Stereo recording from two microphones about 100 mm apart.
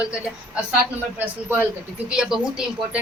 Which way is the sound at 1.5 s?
15° right (ahead or behind).